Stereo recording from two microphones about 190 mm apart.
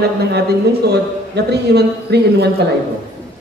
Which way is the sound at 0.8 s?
60° right (ahead or behind).